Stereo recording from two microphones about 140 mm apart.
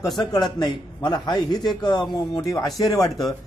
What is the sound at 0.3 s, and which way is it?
A man's voice, 30° left (ahead or behind).